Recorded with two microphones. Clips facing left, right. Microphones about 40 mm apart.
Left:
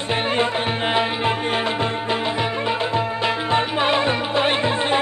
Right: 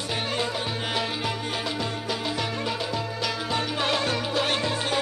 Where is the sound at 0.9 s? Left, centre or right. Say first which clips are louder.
Left 8 dB; left.